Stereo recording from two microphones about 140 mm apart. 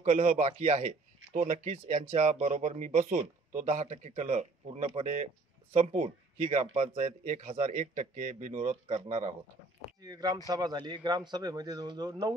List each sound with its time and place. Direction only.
0.0 s speech: 50° right (ahead or behind)
10.0 s a man's voice: 25° right (ahead or behind)